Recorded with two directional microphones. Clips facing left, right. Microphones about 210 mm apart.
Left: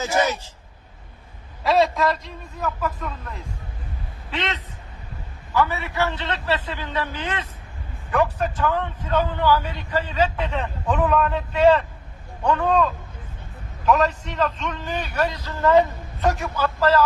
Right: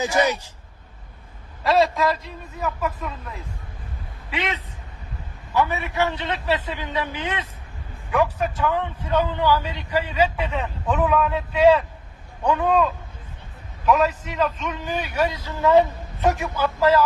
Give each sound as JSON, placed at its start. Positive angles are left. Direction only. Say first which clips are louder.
{"t": 0.2, "sound": "a man's voice", "louder": "right 1 dB", "side_deg": -15}
{"t": 1.6, "sound": "a man's voice", "louder": "even", "side_deg": 0}